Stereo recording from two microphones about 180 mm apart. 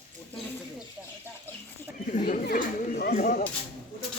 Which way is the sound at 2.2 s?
55° left (ahead or behind).